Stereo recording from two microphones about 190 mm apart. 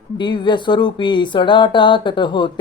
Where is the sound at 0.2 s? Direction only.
25° left (ahead or behind).